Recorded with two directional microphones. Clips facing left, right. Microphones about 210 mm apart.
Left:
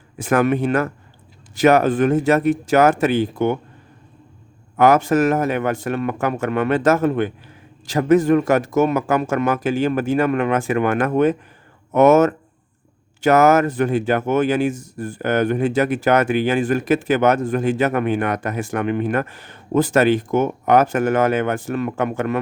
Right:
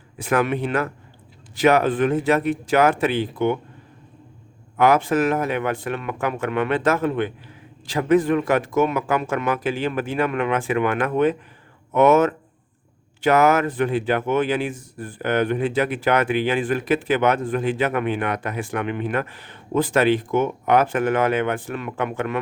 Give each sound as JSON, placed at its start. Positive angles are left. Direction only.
{"t": 0.2, "sound": "speech", "side_deg": 45}
{"t": 4.8, "sound": "speech", "side_deg": 45}